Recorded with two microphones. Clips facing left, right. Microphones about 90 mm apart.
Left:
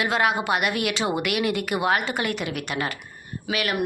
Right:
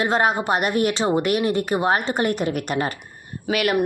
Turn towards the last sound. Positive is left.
turn(degrees=-40)  # may be behind; listen again after turning